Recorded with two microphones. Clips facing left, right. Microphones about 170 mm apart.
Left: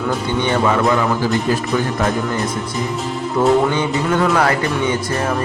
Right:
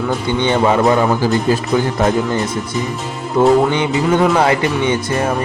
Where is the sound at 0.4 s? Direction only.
25° right (ahead or behind).